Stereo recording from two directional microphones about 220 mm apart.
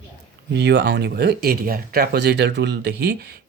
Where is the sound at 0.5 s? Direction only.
50° right (ahead or behind).